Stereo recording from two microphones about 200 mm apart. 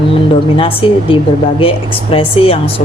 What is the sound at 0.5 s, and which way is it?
A woman's voice, 25° left (ahead or behind).